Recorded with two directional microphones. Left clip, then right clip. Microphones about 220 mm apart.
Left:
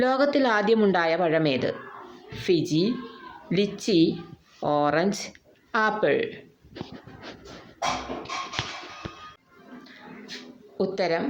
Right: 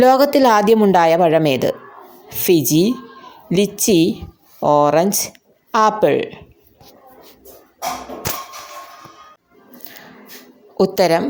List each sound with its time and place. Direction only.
0.0 s a woman's voice: 40° right (ahead or behind)
10.8 s a woman's voice: 45° right (ahead or behind)